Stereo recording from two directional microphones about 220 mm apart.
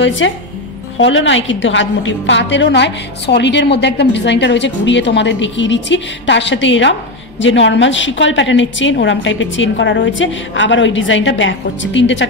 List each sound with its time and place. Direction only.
0.0 s a woman's voice: 55° left (ahead or behind)